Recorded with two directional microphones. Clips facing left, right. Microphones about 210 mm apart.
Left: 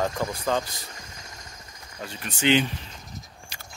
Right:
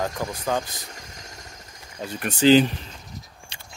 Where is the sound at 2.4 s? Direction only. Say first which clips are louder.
Right 6 dB; 35° right (ahead or behind).